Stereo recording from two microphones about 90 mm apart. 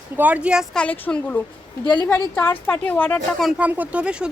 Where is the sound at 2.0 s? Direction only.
25° left (ahead or behind).